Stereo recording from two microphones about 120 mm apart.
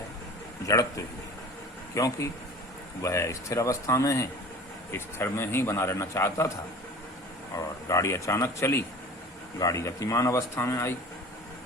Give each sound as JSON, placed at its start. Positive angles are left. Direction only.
{"t": 0.6, "sound": "a man's voice", "side_deg": 25}
{"t": 7.5, "sound": "a man's voice", "side_deg": 25}